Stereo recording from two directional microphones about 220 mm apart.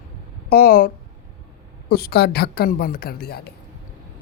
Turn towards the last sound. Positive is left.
turn(degrees=45)  # may be behind; listen again after turning